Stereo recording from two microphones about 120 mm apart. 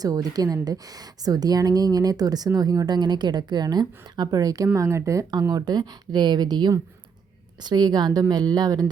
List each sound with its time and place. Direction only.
0.0 s a woman's voice: 30° right (ahead or behind)